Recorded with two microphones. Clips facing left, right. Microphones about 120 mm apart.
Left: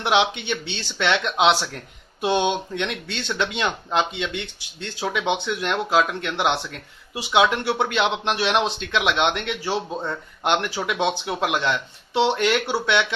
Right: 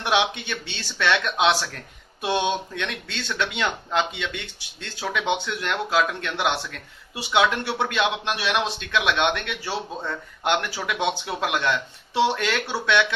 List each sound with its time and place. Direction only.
0.0 s speech: 20° left (ahead or behind)